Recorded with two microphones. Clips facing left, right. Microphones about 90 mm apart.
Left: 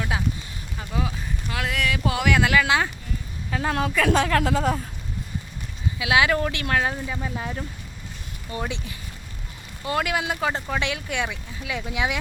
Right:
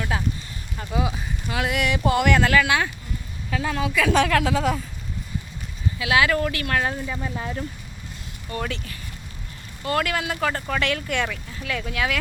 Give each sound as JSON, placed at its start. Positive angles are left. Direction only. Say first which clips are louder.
{"t": 0.9, "sound": "speech", "louder": "right 3 dB", "side_deg": -15}
{"t": 2.6, "sound": "speech", "louder": "even", "side_deg": 25}
{"t": 3.5, "sound": "a woman's voice", "louder": "even", "side_deg": 35}
{"t": 3.8, "sound": "a woman's voice", "louder": "right 1 dB", "side_deg": 45}
{"t": 6.0, "sound": "speech", "louder": "even", "side_deg": 15}
{"t": 6.7, "sound": "speech", "louder": "left 1 dB", "side_deg": 5}